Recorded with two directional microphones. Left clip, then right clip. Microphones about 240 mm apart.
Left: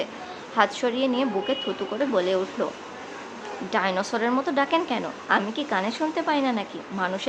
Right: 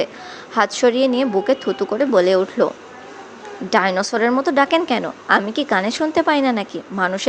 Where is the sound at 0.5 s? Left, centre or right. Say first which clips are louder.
Right 7 dB; right.